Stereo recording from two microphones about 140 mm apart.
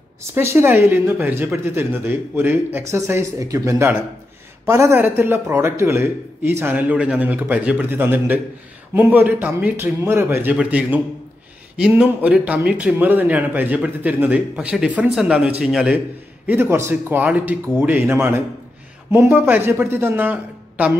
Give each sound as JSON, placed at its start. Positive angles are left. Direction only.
{"t": 0.3, "sound": "a man's voice", "side_deg": -20}
{"t": 16.4, "sound": "a man's voice", "side_deg": -15}